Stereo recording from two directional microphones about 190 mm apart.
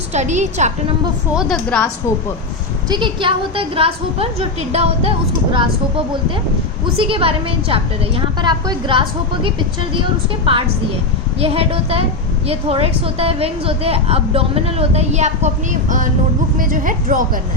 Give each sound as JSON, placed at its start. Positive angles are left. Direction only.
{"t": 0.1, "sound": "a woman's voice", "side_deg": -40}
{"t": 1.3, "sound": "a woman's voice", "side_deg": 0}
{"t": 2.9, "sound": "a woman's voice", "side_deg": -25}
{"t": 6.9, "sound": "a woman's voice", "side_deg": -30}